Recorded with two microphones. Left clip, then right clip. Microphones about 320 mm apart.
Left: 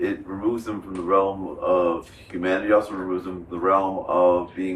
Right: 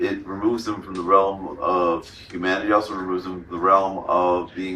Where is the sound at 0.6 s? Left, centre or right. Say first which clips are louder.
Right 2 dB; centre.